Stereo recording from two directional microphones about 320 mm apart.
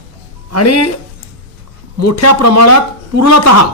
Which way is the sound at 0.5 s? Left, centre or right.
Left.